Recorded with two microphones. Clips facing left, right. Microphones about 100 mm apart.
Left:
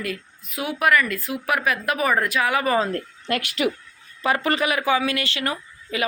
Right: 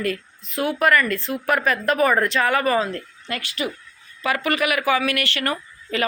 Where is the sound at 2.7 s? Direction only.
30° left (ahead or behind).